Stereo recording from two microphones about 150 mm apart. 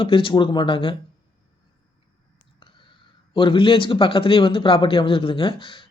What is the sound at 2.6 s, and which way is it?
Speech, 35° left (ahead or behind).